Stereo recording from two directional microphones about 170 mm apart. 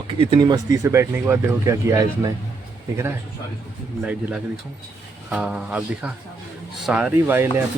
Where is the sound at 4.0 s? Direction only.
10° right (ahead or behind).